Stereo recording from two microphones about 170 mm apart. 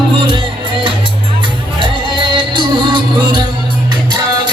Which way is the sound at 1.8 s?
30° right (ahead or behind).